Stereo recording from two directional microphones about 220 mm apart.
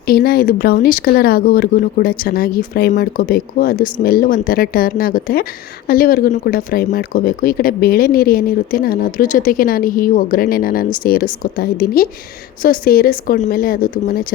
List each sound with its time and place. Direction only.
0.0 s speech: 45° left (ahead or behind)